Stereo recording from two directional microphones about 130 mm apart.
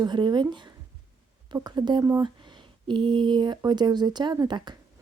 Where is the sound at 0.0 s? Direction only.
35° right (ahead or behind).